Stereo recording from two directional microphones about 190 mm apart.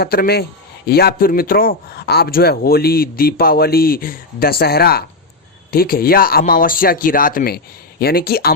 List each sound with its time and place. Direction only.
0.0 s speech: 55° left (ahead or behind)